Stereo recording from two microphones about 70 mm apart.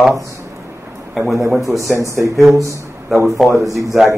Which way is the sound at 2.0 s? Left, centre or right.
Right.